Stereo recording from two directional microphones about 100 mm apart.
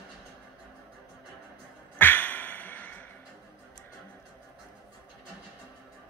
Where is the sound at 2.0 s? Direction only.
20° left (ahead or behind).